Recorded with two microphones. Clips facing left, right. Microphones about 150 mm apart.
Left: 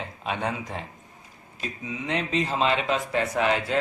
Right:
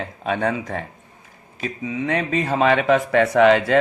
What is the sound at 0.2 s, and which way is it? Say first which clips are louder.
A man's voice: right 7 dB; 50° right (ahead or behind).